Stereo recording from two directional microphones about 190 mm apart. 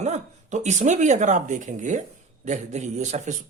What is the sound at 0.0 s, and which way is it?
A man's voice, 35° right (ahead or behind).